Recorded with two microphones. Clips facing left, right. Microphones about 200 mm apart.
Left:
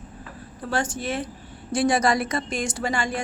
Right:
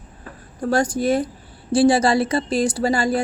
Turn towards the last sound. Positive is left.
turn(degrees=-35)  # may be behind; listen again after turning